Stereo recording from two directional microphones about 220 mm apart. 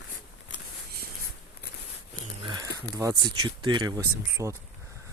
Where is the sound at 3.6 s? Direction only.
20° right (ahead or behind).